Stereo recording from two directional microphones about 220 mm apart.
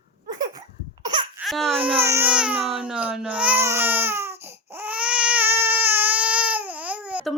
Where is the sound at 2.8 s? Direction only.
5° right (ahead or behind).